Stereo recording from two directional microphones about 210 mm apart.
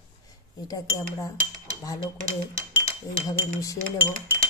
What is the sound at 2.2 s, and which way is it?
Cutlery, 15° right (ahead or behind).